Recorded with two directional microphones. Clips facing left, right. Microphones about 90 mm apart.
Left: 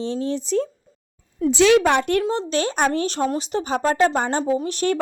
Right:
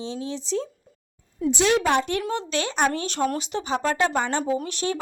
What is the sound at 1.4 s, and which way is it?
Speech, 90° left.